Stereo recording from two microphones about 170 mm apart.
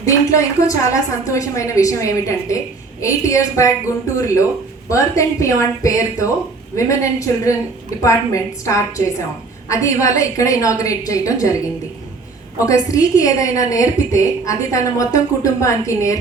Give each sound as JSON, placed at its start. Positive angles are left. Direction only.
{"t": 0.0, "sound": "a woman's voice", "side_deg": 20}
{"t": 12.5, "sound": "a woman's voice", "side_deg": 20}